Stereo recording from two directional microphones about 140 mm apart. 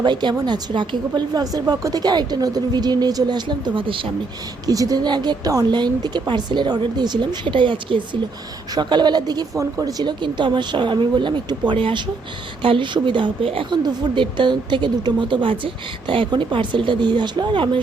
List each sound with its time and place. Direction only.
0.0 s a woman's voice: 35° right (ahead or behind)
4.6 s speech: 25° right (ahead or behind)